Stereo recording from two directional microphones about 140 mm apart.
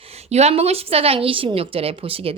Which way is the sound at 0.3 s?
50° right (ahead or behind).